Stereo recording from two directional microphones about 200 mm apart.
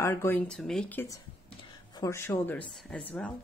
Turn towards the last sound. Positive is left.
turn(degrees=5)  # may be behind; listen again after turning